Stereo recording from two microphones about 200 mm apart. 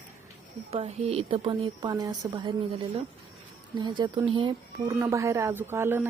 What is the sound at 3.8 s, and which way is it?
Speech, 20° right (ahead or behind).